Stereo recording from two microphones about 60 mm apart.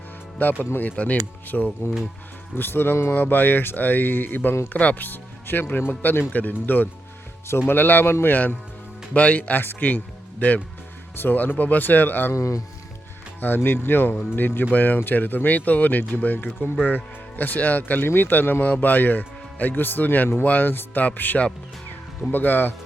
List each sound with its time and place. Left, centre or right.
0.6 s speech: left
11.2 s speech: left
12.3 s speech: left
13.4 s speech: left